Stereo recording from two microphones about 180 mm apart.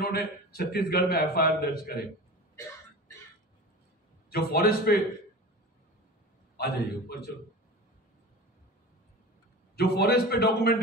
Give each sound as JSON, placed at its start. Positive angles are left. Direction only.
{"t": 0.0, "sound": "a man's voice", "side_deg": 60}
{"t": 4.3, "sound": "a man's voice", "side_deg": 60}
{"t": 6.5, "sound": "a man's voice", "side_deg": 65}
{"t": 9.8, "sound": "a man's voice", "side_deg": 60}